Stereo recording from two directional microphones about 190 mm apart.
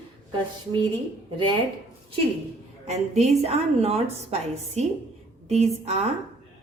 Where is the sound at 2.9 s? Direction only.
35° right (ahead or behind).